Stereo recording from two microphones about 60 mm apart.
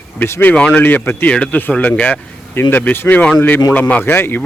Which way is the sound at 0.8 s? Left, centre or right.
Left.